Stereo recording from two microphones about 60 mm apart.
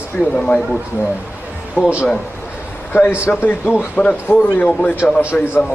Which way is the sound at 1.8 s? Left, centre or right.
Left.